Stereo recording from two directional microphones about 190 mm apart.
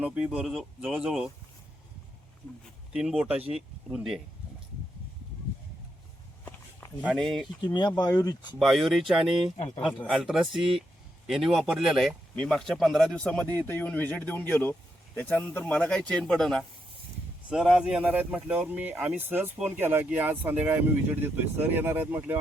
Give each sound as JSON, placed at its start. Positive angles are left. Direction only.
{"t": 0.0, "sound": "speech", "side_deg": -5}
{"t": 2.9, "sound": "speech", "side_deg": 0}
{"t": 7.0, "sound": "speech", "side_deg": 0}
{"t": 7.6, "sound": "speech", "side_deg": 25}
{"t": 8.5, "sound": "speech", "side_deg": 0}
{"t": 9.6, "sound": "speech", "side_deg": 35}
{"t": 10.0, "sound": "speech", "side_deg": -5}